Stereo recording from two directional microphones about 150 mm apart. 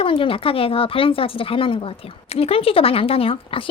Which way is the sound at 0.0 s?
35° left (ahead or behind).